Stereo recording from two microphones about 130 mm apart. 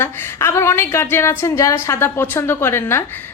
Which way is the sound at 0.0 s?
20° left (ahead or behind).